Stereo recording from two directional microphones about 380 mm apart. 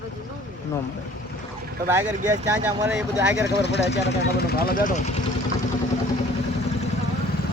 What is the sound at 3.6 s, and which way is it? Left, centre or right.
Speech, left.